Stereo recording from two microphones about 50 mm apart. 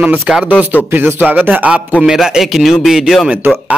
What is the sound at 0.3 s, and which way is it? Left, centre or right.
Speech, centre.